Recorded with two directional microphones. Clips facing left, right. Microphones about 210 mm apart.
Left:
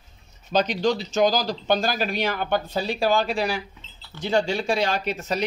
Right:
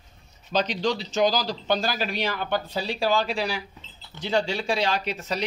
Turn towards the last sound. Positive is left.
turn(degrees=50)  # may be behind; listen again after turning